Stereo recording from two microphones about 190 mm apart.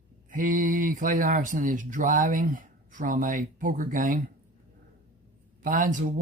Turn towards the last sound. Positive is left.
turn(degrees=-45)  # may be behind; listen again after turning